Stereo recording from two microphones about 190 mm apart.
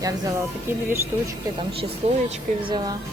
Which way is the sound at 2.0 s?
30° right (ahead or behind).